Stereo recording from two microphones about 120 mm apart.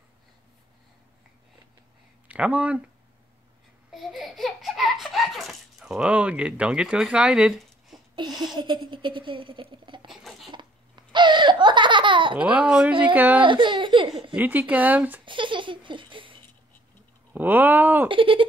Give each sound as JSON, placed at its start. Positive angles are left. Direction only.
{"t": 2.2, "sound": "speech", "side_deg": -10}
{"t": 3.9, "sound": "a sound", "side_deg": 0}
{"t": 8.2, "sound": "a sound", "side_deg": -35}
{"t": 8.5, "sound": "speech", "side_deg": -40}
{"t": 10.5, "sound": "laughter", "side_deg": -40}
{"t": 12.4, "sound": "speech", "side_deg": -10}
{"t": 13.4, "sound": "a child's voice", "side_deg": -45}
{"t": 14.3, "sound": "speech", "side_deg": -15}
{"t": 15.2, "sound": "laughter", "side_deg": -45}
{"t": 17.3, "sound": "speech", "side_deg": -15}
{"t": 18.0, "sound": "speech", "side_deg": -45}